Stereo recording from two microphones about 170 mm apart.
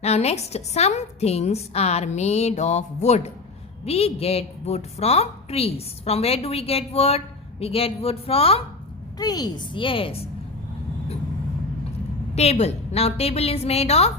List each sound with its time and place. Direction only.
0.0 s a woman's voice: 40° left (ahead or behind)
9.1 s a woman's voice: 20° left (ahead or behind)
12.3 s a woman's voice: 40° left (ahead or behind)